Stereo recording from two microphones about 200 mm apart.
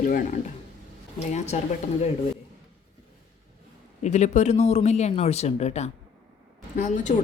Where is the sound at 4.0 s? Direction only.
35° left (ahead or behind).